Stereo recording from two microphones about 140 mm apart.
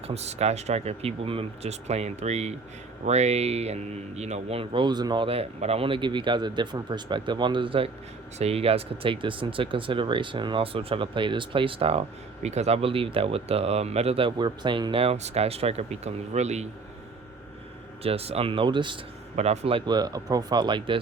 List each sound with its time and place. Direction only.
0.1 s speech: 50° right (ahead or behind)
18.0 s speech: 45° right (ahead or behind)
19.4 s speech: 45° right (ahead or behind)